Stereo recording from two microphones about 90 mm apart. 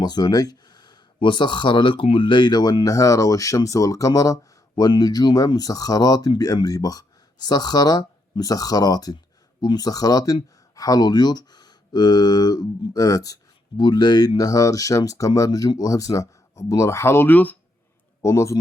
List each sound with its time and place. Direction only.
0.0 s speech: 50° left (ahead or behind)
13.7 s speech: 55° left (ahead or behind); by 17.6 s 20° left (ahead or behind)
18.2 s a man's voice: 35° left (ahead or behind)